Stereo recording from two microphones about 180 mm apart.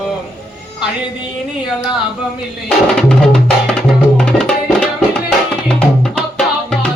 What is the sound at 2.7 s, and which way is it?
Music, 5° left (ahead or behind).